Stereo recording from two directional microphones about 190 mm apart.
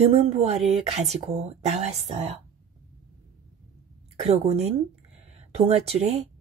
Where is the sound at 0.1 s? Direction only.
35° right (ahead or behind).